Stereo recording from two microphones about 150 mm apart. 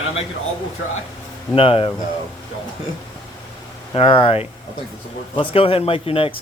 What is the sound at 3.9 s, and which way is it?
Speech, 35° left (ahead or behind).